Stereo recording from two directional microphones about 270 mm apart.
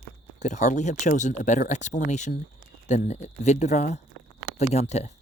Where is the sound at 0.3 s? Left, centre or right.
Left.